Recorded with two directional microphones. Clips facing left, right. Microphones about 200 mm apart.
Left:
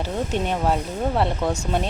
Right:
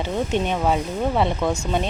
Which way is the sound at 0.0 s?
5° left (ahead or behind).